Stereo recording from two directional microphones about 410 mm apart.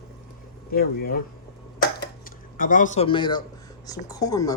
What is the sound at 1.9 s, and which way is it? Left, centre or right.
Dishes, centre.